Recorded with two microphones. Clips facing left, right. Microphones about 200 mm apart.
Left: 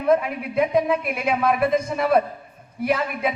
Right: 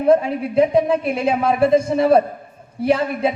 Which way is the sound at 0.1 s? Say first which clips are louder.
Right 4 dB; 30° right (ahead or behind).